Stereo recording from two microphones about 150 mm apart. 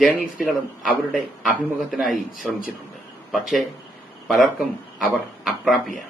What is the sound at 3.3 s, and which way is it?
Speech, centre (ahead or behind).